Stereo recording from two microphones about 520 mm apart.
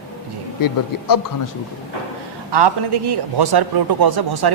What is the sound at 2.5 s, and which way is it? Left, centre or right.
A man's voice, right.